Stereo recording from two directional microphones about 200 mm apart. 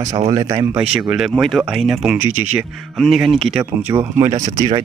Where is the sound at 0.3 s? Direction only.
20° right (ahead or behind).